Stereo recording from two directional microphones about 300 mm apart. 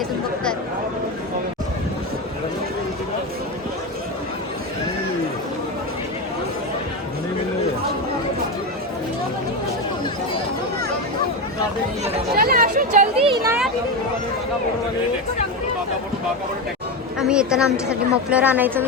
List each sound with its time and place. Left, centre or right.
12.0 s chatter: right
17.2 s speech: centre